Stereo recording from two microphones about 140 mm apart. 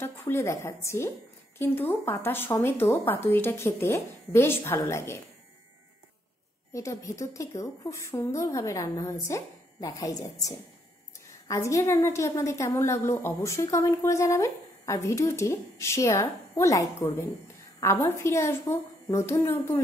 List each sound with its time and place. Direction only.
0.0 s a woman's voice: 15° left (ahead or behind)
6.7 s a woman's voice: 20° left (ahead or behind)